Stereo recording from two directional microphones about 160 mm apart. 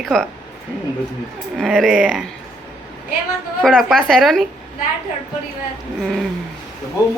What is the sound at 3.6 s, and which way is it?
Speech, centre (ahead or behind).